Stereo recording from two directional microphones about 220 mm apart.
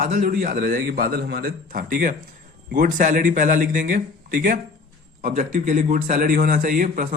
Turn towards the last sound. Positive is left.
turn(degrees=-40)  # may be behind; listen again after turning